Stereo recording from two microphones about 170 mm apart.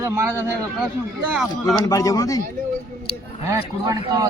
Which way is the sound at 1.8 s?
20° left (ahead or behind).